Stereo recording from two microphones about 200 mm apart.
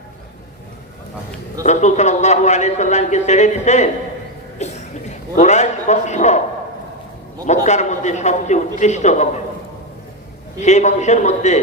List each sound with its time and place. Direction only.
1.6 s speech: 35° left (ahead or behind)
4.5 s a sound: 35° left (ahead or behind)
7.4 s speech: 35° left (ahead or behind)
10.6 s speech: 35° left (ahead or behind)